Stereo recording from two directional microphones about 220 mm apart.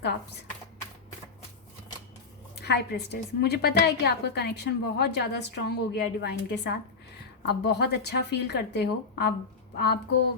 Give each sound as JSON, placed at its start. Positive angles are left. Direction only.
{"t": 2.6, "sound": "a woman's voice", "side_deg": 50}